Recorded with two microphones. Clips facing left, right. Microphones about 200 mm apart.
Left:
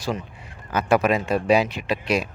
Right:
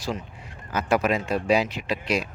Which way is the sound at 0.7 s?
60° left (ahead or behind).